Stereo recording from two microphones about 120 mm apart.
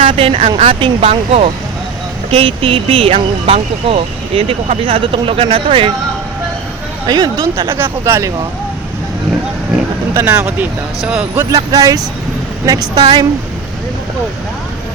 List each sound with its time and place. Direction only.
0.2 s speech: 50° right (ahead or behind)
7.5 s speech: 45° right (ahead or behind)
7.8 s speech: 20° right (ahead or behind)
9.7 s speech: 10° right (ahead or behind)
11.3 s a woman's voice: 25° right (ahead or behind)